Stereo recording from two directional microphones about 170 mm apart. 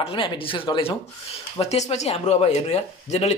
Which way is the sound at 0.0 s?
30° left (ahead or behind).